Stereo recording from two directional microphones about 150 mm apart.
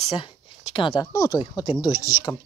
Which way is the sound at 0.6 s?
35° left (ahead or behind).